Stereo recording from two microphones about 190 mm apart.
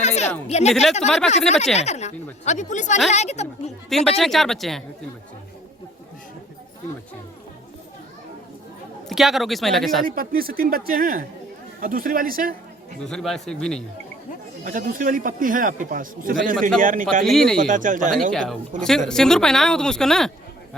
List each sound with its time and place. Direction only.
0.0 s a sound: 35° left (ahead or behind)
0.3 s a woman's voice: 10° left (ahead or behind)
1.3 s speech: 35° left (ahead or behind)
3.8 s speech: centre (ahead or behind)
9.0 s speech: centre (ahead or behind)
10.0 s a man's voice: 50° right (ahead or behind)
13.0 s speech: 5° left (ahead or behind)
14.6 s a man's voice: 45° right (ahead or behind)
17.2 s speech: centre (ahead or behind)
17.6 s a man's voice: 45° right (ahead or behind)
18.1 s speech: centre (ahead or behind)